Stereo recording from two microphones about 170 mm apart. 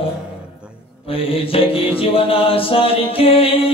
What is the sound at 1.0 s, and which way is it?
Music, 35° left (ahead or behind).